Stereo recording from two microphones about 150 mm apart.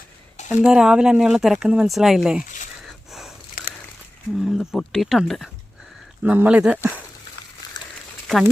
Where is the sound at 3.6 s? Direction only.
80° left.